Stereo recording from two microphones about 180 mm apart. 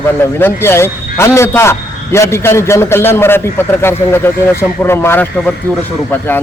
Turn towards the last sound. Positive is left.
turn(degrees=10)  # may be behind; listen again after turning